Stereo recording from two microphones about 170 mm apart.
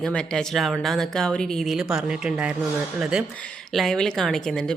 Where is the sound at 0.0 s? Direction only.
5° left (ahead or behind).